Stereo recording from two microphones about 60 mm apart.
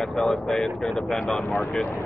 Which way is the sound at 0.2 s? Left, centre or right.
Centre.